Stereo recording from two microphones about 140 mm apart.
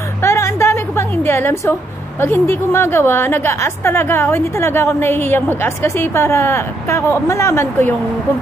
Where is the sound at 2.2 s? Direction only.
20° left (ahead or behind).